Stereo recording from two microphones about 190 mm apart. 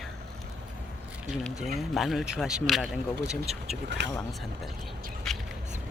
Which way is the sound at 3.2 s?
35° right (ahead or behind).